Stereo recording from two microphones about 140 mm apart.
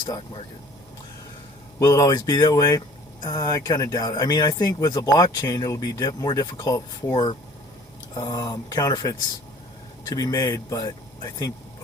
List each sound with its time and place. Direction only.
1.8 s speech: 25° left (ahead or behind)